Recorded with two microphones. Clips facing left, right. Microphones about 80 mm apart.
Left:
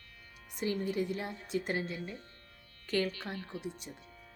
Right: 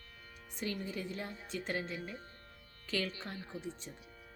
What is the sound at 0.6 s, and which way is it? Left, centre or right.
A woman's voice, centre.